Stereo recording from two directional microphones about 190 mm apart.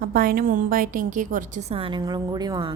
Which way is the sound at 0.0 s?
50° right (ahead or behind).